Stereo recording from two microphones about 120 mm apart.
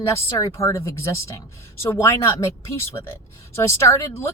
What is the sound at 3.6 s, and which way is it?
Speech, 25° left (ahead or behind).